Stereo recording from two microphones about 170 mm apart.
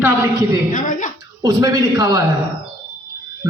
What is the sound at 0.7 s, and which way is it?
Speech, 50° left (ahead or behind).